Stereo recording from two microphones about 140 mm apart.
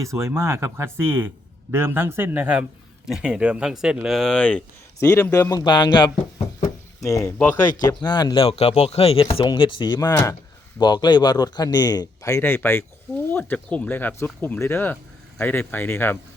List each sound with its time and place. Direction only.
0.0 s a man's voice: 20° right (ahead or behind); by 6.1 s 35° left (ahead or behind)
7.0 s a man's voice: 20° left (ahead or behind)
7.9 s speech: 30° left (ahead or behind)
8.4 s a man's voice: 45° left (ahead or behind); by 16.1 s 15° left (ahead or behind)